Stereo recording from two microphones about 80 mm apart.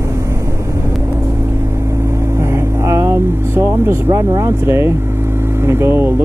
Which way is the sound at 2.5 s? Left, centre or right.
Right.